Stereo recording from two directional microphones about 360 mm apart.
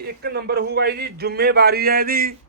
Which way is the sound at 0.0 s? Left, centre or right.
Right.